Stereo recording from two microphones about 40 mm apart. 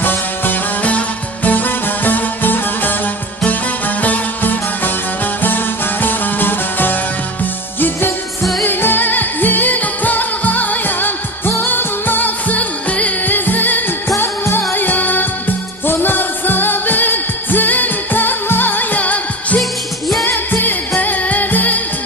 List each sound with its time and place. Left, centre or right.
0.0 s music: left
0.8 s music: left
4.0 s music: left
8.6 s music: left
13.2 s music: left
14.2 s music: left
14.7 s music: left
20.2 s music: left
21.0 s music: left